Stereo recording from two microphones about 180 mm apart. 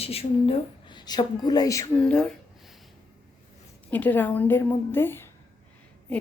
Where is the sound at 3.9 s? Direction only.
10° left (ahead or behind).